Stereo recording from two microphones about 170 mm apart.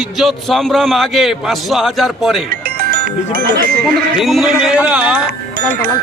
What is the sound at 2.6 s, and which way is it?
Music, 65° right (ahead or behind).